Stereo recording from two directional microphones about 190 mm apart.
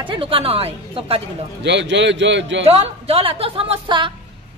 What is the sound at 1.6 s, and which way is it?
A man's voice, 65° right (ahead or behind).